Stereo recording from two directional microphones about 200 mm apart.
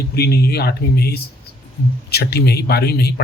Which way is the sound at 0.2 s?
50° left (ahead or behind).